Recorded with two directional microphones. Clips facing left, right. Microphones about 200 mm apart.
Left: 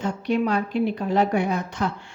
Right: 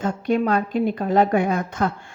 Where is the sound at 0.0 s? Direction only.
50° right (ahead or behind).